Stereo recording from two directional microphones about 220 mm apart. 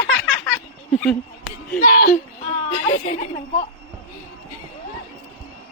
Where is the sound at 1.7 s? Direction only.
40° left (ahead or behind).